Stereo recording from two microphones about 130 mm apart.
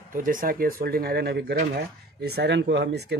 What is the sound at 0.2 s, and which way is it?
Speech, 90° right.